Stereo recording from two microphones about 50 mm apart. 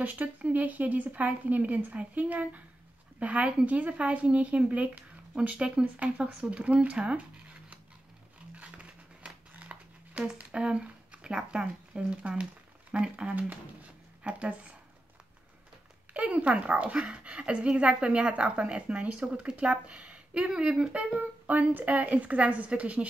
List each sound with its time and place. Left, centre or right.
0.0 s a woman's voice: right
8.5 s a sound: right
10.3 s a woman's voice: right
16.1 s a woman's voice: right
21.2 s a woman's voice: right